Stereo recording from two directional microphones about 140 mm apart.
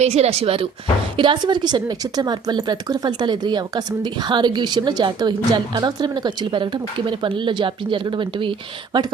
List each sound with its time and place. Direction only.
0.0 s a woman's voice: 50° right (ahead or behind); by 9.1 s 30° right (ahead or behind)